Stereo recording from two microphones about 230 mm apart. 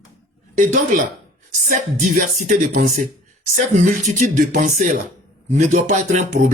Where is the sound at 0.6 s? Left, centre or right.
Right.